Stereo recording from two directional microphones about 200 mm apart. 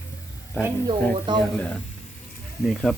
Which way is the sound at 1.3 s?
25° right (ahead or behind).